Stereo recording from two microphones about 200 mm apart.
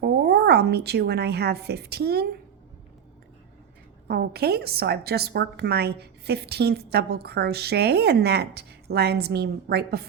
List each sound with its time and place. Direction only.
0.0 s a woman's voice: 55° right (ahead or behind)
4.1 s a woman's voice: 55° right (ahead or behind)